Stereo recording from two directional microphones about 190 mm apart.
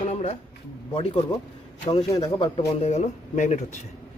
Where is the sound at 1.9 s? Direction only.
30° left (ahead or behind).